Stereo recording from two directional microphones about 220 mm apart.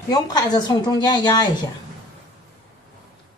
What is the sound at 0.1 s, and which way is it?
A woman's voice, 20° left (ahead or behind).